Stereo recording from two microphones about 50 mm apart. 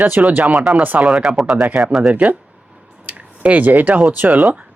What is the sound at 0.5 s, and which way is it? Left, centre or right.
Speech, centre.